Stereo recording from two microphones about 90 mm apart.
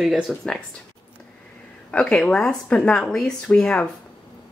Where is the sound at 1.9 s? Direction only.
10° left (ahead or behind).